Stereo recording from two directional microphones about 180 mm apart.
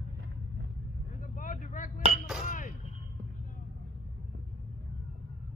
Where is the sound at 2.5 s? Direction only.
45° left (ahead or behind).